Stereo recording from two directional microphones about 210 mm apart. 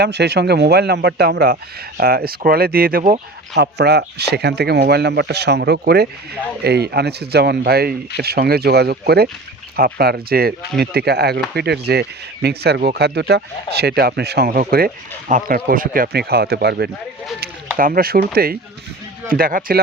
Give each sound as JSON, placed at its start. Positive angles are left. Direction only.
{"t": 0.0, "sound": "speech", "side_deg": -50}